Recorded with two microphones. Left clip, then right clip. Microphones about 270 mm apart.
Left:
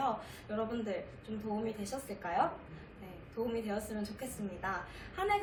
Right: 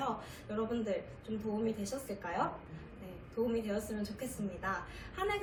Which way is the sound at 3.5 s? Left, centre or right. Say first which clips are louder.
Right 1 dB; centre.